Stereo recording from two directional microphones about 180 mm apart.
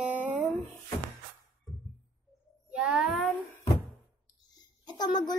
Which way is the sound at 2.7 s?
5° right (ahead or behind).